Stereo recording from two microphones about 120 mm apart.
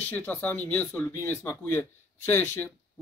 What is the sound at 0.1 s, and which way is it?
Speech, 15° left (ahead or behind).